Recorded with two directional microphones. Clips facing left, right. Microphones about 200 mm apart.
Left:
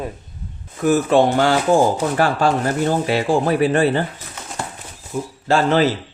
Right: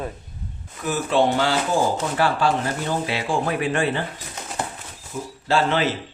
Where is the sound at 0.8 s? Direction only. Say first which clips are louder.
Left 6 dB; 45° left (ahead or behind).